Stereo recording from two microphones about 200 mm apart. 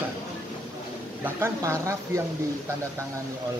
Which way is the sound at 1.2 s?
15° right (ahead or behind).